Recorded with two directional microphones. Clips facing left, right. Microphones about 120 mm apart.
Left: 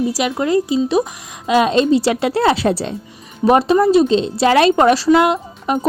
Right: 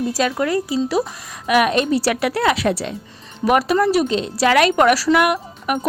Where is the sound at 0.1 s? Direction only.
15° left (ahead or behind).